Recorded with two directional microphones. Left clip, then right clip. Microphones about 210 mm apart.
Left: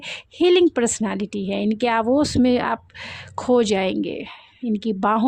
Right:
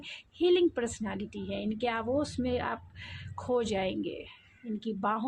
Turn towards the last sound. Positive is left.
turn(degrees=50)  # may be behind; listen again after turning